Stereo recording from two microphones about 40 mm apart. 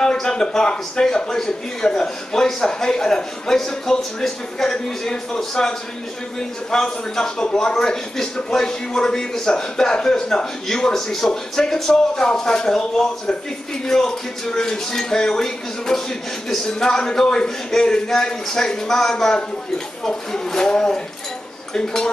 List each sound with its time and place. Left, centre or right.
0.0 s a man's voice: centre
13.8 s a man's voice: centre